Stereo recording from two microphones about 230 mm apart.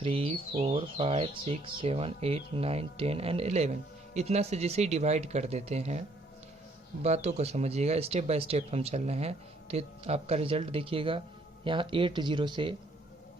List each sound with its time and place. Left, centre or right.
0.0 s speech: right